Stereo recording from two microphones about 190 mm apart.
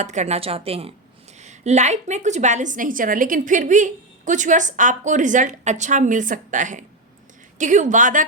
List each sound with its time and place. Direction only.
0.0 s a woman's voice: 40° right (ahead or behind)